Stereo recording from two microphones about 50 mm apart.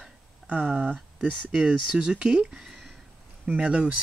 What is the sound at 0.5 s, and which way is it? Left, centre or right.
Speech, right.